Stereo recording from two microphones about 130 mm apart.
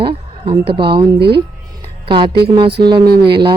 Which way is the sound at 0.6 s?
40° right (ahead or behind).